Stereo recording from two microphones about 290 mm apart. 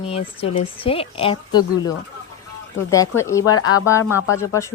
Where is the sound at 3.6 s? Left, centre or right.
Left.